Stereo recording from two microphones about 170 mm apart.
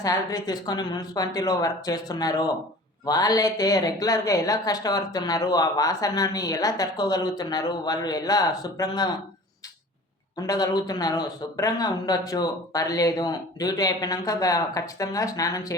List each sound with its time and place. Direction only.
0.0 s speech: 20° left (ahead or behind)
10.3 s speech: 20° left (ahead or behind)